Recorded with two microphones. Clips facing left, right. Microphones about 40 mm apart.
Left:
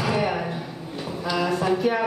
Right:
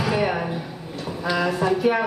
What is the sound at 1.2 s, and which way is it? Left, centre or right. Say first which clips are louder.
Speech: right 2 dB; centre.